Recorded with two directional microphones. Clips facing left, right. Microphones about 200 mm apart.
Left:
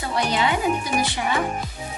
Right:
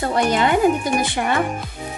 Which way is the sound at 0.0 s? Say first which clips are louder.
Right 5 dB; 50° right (ahead or behind).